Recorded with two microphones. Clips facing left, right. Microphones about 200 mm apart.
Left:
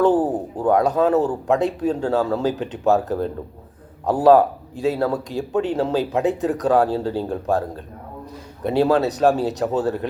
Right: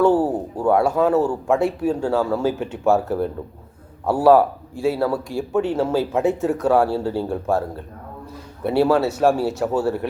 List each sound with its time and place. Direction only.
0.0 s a man's voice: 20° left (ahead or behind)
8.6 s speech: 20° left (ahead or behind)